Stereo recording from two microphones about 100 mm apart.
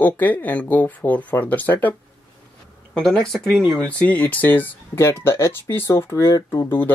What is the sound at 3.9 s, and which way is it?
Speech, 15° left (ahead or behind).